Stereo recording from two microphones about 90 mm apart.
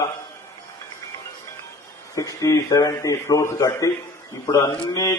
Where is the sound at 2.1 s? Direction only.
40° left (ahead or behind).